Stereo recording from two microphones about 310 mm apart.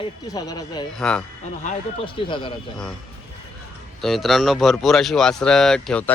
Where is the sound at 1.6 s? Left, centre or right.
Centre.